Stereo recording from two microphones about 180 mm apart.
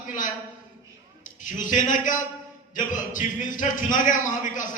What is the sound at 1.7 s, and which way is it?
A man's voice, 45° left (ahead or behind).